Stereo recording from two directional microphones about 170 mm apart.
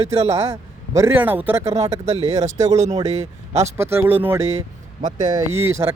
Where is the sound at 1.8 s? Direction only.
40° right (ahead or behind).